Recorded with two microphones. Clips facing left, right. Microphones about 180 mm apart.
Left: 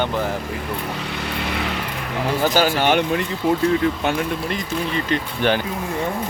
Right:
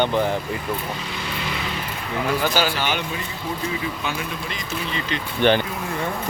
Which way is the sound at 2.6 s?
55° left (ahead or behind).